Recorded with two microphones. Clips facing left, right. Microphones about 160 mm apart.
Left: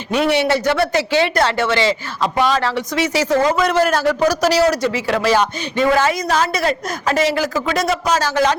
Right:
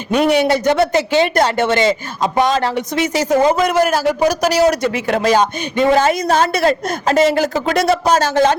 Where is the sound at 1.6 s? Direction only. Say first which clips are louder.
Right 3 dB; 50° right (ahead or behind).